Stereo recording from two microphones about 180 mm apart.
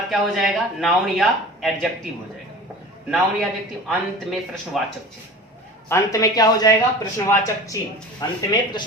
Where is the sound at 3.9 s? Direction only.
Centre (ahead or behind).